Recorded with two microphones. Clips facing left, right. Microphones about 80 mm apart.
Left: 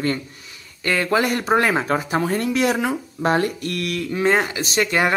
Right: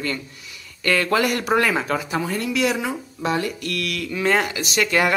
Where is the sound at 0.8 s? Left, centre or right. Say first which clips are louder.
Even; centre.